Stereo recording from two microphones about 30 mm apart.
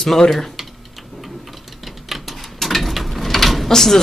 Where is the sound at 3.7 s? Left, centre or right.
Centre.